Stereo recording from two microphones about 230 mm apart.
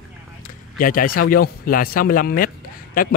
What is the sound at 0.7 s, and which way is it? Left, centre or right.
A man's voice, left.